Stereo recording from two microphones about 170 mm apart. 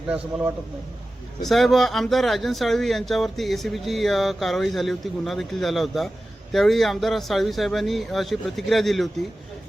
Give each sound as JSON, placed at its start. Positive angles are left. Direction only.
{"t": 1.4, "sound": "speech", "side_deg": 0}